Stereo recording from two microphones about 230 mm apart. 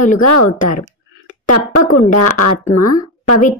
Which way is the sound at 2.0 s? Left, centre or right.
Left.